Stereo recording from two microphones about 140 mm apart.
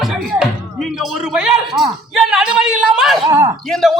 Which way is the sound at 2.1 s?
5° right (ahead or behind).